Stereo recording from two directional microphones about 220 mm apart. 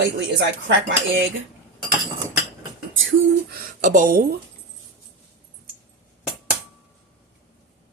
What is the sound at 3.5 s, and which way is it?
Speech, 35° right (ahead or behind).